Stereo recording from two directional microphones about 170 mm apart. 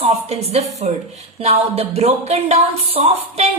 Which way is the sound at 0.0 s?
40° right (ahead or behind).